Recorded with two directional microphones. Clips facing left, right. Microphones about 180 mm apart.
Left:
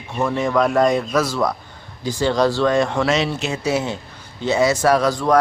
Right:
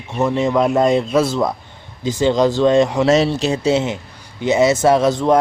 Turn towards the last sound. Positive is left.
turn(degrees=-20)  # may be behind; listen again after turning